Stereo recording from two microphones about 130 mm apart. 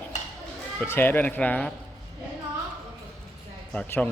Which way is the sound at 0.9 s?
15° left (ahead or behind).